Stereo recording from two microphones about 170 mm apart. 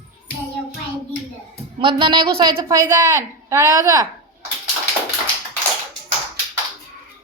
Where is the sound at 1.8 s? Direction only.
25° right (ahead or behind).